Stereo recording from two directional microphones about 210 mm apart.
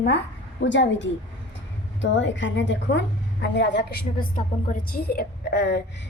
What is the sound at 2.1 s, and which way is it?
A woman's voice, 60° left (ahead or behind).